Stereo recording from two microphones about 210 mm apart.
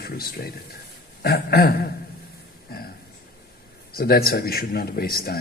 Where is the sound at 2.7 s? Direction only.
45° left (ahead or behind).